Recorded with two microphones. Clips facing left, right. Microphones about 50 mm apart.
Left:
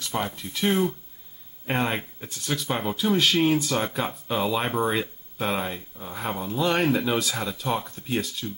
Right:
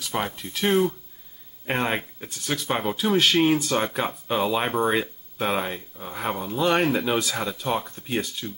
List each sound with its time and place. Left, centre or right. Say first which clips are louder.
0.1 s speech: right 1 dB; centre
1.7 s speech: right 1 dB; centre